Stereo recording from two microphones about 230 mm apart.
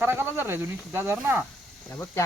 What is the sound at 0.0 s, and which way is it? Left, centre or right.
Speech, centre.